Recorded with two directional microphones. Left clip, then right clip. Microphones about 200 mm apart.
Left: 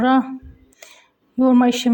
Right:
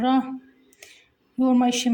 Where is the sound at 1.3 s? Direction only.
15° left (ahead or behind).